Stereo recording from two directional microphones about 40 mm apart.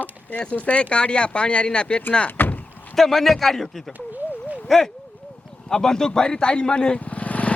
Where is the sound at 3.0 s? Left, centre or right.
Centre.